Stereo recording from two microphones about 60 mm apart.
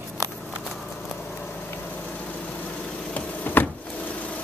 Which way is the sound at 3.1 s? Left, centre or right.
Left.